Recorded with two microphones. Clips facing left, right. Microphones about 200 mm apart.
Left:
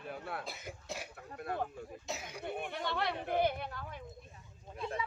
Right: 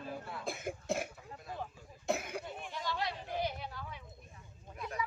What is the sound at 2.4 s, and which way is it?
Speech, 60° left (ahead or behind).